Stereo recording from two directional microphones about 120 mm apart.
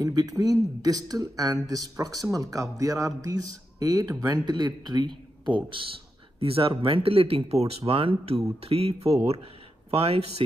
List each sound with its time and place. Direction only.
0.0 s speech: 30° right (ahead or behind)
6.4 s speech: 50° right (ahead or behind)